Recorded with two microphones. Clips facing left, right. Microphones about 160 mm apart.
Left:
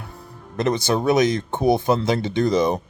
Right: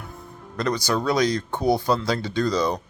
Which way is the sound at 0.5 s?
25° left (ahead or behind).